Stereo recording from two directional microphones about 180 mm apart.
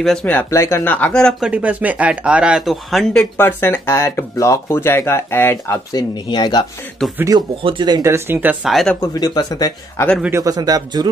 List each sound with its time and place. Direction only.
0.0 s speech: 5° left (ahead or behind)
1.5 s speech: 10° right (ahead or behind); by 6.0 s 15° left (ahead or behind)
6.2 s speech: 25° left (ahead or behind)
7.2 s speech: 20° right (ahead or behind); by 8.9 s centre (ahead or behind)
9.0 s speech: 20° left (ahead or behind)
10.2 s speech: 15° right (ahead or behind)